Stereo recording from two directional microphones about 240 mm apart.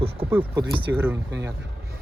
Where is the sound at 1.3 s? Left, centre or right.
Right.